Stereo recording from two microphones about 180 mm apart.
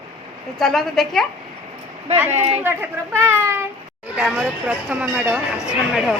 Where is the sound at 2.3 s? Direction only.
35° right (ahead or behind).